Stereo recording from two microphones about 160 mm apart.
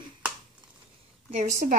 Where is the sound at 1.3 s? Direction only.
55° right (ahead or behind).